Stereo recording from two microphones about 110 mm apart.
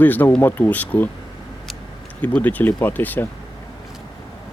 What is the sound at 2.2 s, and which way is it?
Speech, 15° left (ahead or behind).